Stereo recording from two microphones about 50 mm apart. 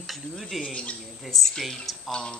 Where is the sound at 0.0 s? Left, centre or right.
Centre.